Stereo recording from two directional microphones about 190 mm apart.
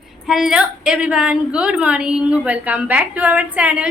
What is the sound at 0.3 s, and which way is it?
A woman's voice, centre (ahead or behind).